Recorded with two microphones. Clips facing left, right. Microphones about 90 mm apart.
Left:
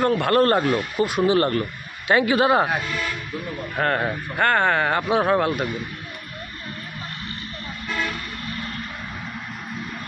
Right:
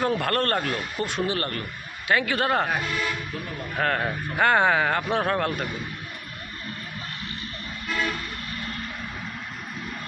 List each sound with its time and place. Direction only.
0.0 s a man's voice: centre (ahead or behind); by 2.3 s 25° left (ahead or behind)
2.3 s speech: 10° left (ahead or behind)
4.4 s speech: 10° right (ahead or behind); by 5.7 s 10° left (ahead or behind)